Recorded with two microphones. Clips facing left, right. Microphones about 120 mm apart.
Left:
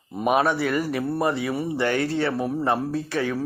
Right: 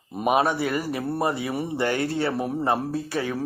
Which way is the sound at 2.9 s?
35° right (ahead or behind).